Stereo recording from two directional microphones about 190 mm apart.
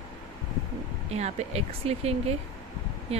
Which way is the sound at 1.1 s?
35° right (ahead or behind).